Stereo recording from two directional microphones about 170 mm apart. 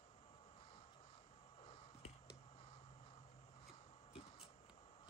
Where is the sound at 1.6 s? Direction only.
35° left (ahead or behind).